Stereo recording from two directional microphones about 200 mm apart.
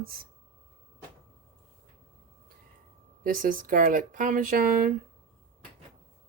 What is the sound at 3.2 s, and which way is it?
Speech, 45° right (ahead or behind).